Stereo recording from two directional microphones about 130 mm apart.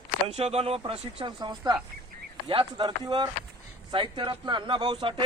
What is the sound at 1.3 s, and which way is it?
Speech, 35° right (ahead or behind).